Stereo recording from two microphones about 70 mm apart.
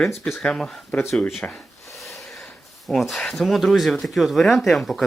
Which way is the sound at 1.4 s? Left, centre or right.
Left.